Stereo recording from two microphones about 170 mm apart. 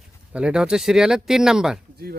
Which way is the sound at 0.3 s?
5° right (ahead or behind).